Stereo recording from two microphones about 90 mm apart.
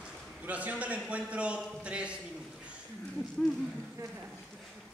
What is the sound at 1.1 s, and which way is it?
Speech, 15° right (ahead or behind).